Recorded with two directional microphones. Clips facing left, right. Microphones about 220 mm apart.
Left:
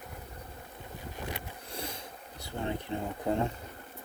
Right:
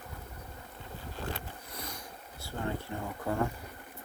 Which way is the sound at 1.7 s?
30° left (ahead or behind).